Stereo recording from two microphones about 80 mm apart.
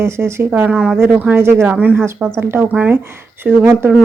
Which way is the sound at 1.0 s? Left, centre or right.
Right.